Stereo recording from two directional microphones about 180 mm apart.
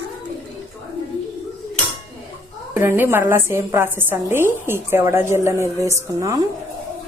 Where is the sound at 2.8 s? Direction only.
10° right (ahead or behind).